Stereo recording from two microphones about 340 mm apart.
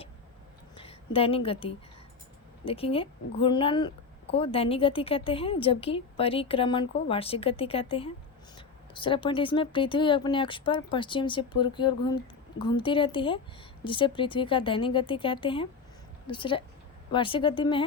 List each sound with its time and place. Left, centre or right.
0.8 s a woman's voice: centre